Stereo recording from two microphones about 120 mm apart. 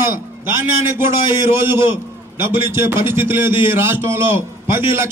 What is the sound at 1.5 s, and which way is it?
A man's voice, 20° right (ahead or behind).